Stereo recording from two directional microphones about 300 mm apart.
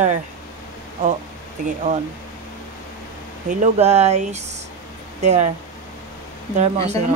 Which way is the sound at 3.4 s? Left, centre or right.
Right.